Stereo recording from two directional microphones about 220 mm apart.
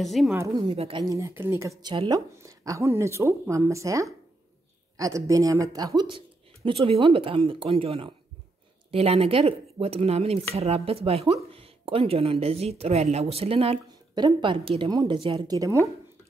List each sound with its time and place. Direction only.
0.0 s a woman's voice: centre (ahead or behind)
0.3 s speech: 10° right (ahead or behind)
0.6 s speech: 25° right (ahead or behind)